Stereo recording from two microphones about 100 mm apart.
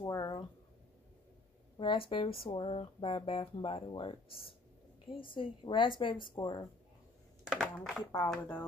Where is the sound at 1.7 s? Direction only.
60° left (ahead or behind); by 6.6 s 45° left (ahead or behind).